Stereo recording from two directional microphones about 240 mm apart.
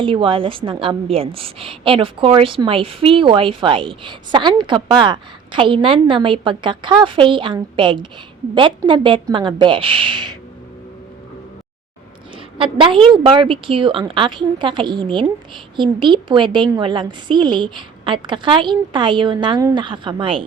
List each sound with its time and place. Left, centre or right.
0.0 s a woman's voice: right
12.5 s a woman's voice: right